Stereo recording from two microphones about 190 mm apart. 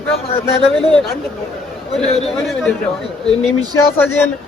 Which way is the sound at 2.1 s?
30° left (ahead or behind).